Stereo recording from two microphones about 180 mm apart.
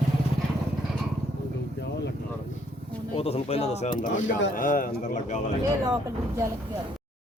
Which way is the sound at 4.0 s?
45° left (ahead or behind).